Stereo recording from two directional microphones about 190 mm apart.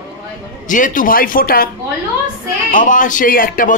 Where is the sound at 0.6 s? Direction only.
45° left (ahead or behind).